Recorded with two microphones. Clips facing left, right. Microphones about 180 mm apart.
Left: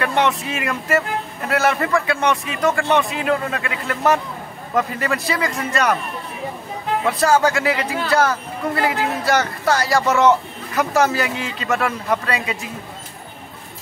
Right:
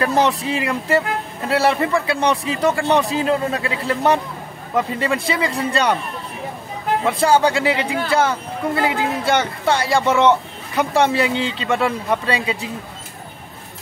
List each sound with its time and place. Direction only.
0.0 s speech: 35° right (ahead or behind)
1.8 s a man's voice: 20° right (ahead or behind)
2.0 s speech: 30° right (ahead or behind)
7.1 s speech: 30° right (ahead or behind)